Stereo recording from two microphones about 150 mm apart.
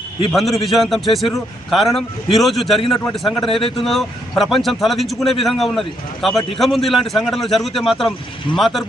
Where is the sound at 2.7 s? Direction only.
35° left (ahead or behind).